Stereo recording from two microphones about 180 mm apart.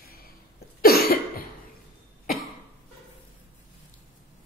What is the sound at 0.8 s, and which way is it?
Cough, 55° left (ahead or behind).